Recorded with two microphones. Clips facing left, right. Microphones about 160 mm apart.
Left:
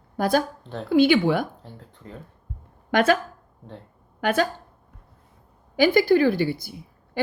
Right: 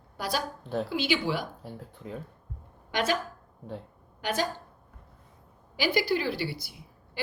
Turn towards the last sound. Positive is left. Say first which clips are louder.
# left 10 dB
turn(degrees=50)  # may be behind; listen again after turning